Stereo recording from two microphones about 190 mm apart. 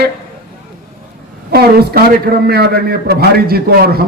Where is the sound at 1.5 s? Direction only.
55° right (ahead or behind).